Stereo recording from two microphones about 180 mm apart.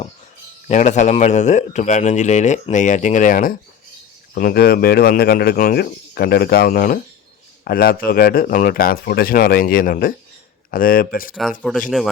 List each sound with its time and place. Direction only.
0.7 s a man's voice: 40° left (ahead or behind)